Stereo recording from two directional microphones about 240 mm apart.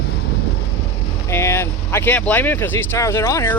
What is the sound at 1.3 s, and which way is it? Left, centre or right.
Speech, centre.